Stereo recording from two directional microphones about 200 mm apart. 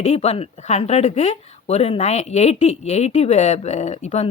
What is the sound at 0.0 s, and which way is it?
A woman's voice, 30° left (ahead or behind).